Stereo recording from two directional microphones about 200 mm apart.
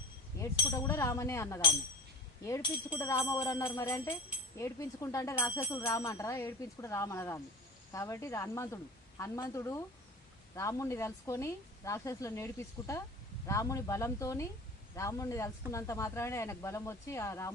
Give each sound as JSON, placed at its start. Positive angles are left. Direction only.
{"t": 0.7, "sound": "speech", "side_deg": 15}